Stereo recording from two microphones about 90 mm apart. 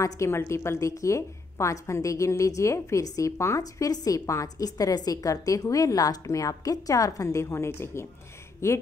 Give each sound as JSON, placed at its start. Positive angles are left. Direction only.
{"t": 0.0, "sound": "a woman's voice", "side_deg": 30}